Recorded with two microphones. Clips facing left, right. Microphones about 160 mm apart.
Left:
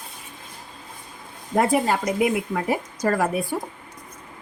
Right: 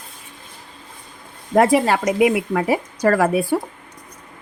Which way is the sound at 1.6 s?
85° right.